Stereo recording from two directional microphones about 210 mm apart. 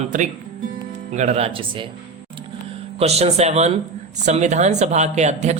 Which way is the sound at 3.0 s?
30° right (ahead or behind).